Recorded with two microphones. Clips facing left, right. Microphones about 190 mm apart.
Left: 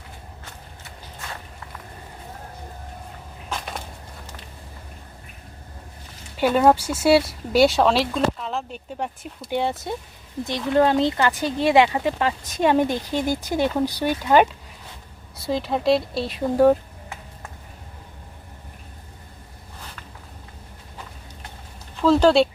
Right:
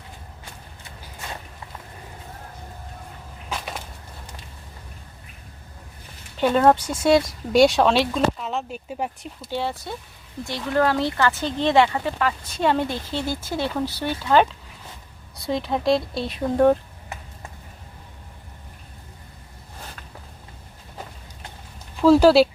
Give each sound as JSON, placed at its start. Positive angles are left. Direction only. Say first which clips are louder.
{"t": 3.5, "sound": "a sound", "louder": "even", "side_deg": -5}
{"t": 6.3, "sound": "speech", "louder": "even", "side_deg": 10}
{"t": 9.5, "sound": "speech", "louder": "left 3 dB", "side_deg": 20}
{"t": 15.4, "sound": "speech", "louder": "left 1 dB", "side_deg": 0}
{"t": 22.0, "sound": "speech", "louder": "right 2 dB", "side_deg": -10}